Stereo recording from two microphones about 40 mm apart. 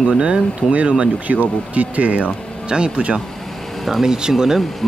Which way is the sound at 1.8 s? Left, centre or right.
Right.